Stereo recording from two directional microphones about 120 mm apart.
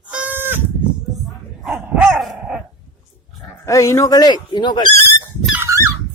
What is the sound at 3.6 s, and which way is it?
Speech, 25° left (ahead or behind).